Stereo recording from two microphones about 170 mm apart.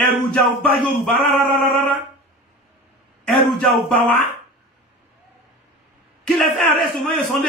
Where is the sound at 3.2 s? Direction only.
Centre (ahead or behind).